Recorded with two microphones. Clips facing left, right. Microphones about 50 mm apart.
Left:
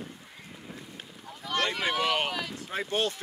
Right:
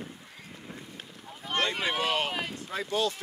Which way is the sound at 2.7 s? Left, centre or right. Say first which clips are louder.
Even; left.